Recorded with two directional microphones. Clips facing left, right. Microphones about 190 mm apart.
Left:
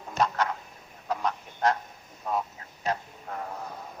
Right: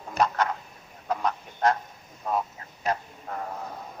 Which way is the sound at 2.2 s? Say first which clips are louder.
Right 2 dB; 50° right (ahead or behind).